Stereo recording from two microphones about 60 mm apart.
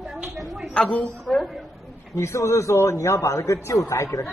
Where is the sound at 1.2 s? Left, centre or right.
Centre.